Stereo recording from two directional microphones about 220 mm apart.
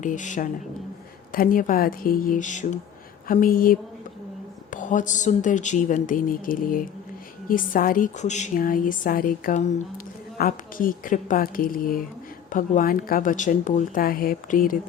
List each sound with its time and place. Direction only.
0.0 s a woman's voice: 35° left (ahead or behind)